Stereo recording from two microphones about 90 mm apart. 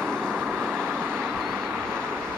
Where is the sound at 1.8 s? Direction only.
10° left (ahead or behind).